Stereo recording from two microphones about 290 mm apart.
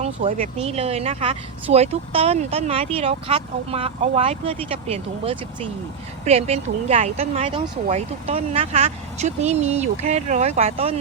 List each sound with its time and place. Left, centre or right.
0.0 s speech: right